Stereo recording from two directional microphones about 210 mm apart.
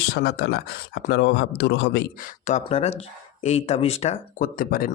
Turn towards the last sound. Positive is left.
turn(degrees=40)  # may be behind; listen again after turning